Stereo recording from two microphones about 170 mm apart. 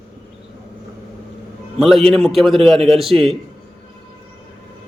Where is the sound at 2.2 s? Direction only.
Centre (ahead or behind).